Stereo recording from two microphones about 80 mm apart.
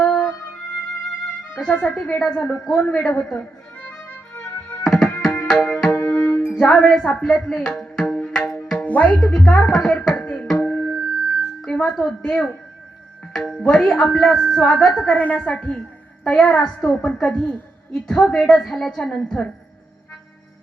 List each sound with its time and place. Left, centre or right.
0.0 s music: centre
1.8 s a woman's voice: centre
4.8 s music: centre
5.5 s tabla: centre
5.9 s music: left
6.5 s a woman's voice: centre
7.3 s tabla: centre
8.8 s speech: centre
9.2 s a woman's voice: centre
10.2 s tabla: centre
11.9 s a woman's voice: centre
15.0 s a woman's voice: centre